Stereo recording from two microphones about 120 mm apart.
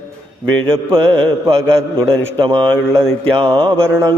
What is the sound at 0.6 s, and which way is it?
Mantra, 45° right (ahead or behind).